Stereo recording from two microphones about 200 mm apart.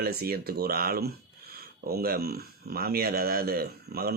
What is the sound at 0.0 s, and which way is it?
Speech, 50° right (ahead or behind).